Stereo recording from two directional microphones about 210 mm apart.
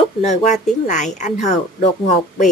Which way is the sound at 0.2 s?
30° left (ahead or behind).